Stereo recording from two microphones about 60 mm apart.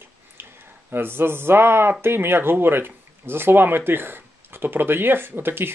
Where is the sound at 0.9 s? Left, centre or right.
Right.